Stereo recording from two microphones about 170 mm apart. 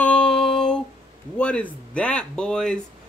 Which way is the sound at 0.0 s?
5° left (ahead or behind).